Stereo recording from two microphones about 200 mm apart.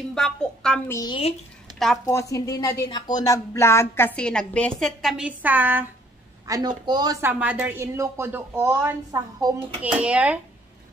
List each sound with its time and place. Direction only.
0.1 s a woman's voice: 5° left (ahead or behind)